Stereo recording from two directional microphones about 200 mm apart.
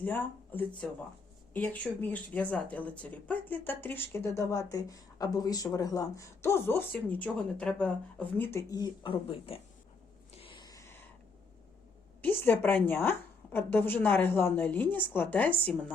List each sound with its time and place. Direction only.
0.0 s speech: 10° left (ahead or behind); by 9.6 s 25° left (ahead or behind)
10.4 s a sound: 25° left (ahead or behind)
12.2 s speech: 10° left (ahead or behind)